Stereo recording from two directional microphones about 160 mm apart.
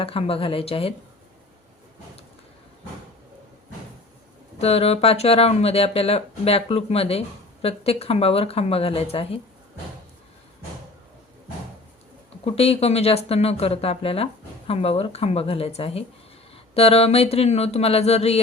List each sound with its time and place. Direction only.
0.0 s speech: 35° left (ahead or behind)
4.5 s speech: 40° left (ahead or behind)
12.5 s speech: 40° left (ahead or behind)